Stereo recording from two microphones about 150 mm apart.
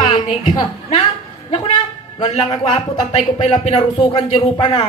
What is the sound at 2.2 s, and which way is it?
Speech, 45° left (ahead or behind).